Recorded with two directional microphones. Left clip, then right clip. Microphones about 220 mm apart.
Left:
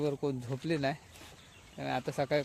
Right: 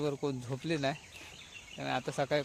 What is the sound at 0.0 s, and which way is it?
Speech, 5° left (ahead or behind).